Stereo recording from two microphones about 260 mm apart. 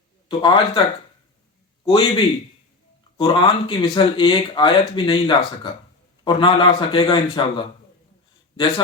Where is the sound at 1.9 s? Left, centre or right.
Centre.